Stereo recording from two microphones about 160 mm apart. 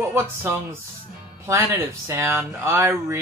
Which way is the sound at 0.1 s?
15° right (ahead or behind).